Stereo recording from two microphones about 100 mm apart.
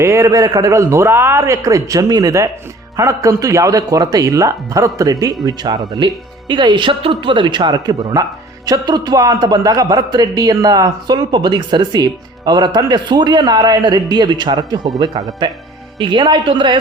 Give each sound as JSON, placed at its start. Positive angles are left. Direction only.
{"t": 0.0, "sound": "a man's voice", "side_deg": -30}